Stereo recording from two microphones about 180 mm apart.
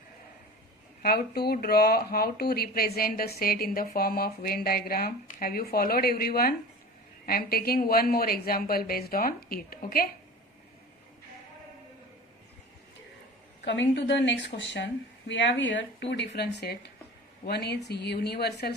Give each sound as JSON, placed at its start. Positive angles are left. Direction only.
{"t": 1.0, "sound": "speech", "side_deg": 60}
{"t": 13.7, "sound": "speech", "side_deg": 80}
{"t": 15.3, "sound": "speech", "side_deg": 90}